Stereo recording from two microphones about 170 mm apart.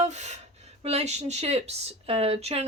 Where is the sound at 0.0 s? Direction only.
40° right (ahead or behind).